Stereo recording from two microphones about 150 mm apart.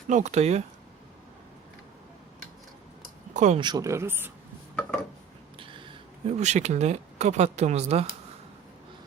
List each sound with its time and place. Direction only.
0.1 s speech: 50° right (ahead or behind)
3.3 s speech: 55° right (ahead or behind)
3.6 s speech: 25° right (ahead or behind)
5.5 s a sound: 35° right (ahead or behind)
6.4 s speech: 50° right (ahead or behind)